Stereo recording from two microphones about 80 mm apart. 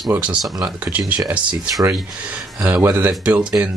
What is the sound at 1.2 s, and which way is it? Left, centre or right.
Speech, centre.